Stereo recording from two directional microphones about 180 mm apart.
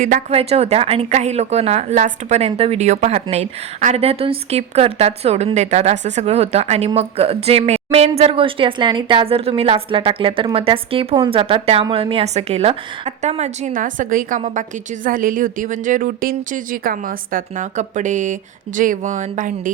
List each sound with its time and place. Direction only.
0.3 s a woman's voice: 35° right (ahead or behind)